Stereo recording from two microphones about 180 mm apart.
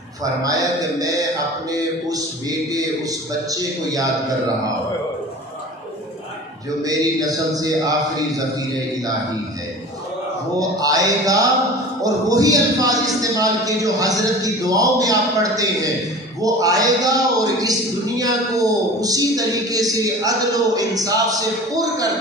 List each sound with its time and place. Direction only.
0.2 s a man's voice: 20° right (ahead or behind)
6.8 s a man's voice: 20° right (ahead or behind)
10.6 s a man's voice: 20° right (ahead or behind)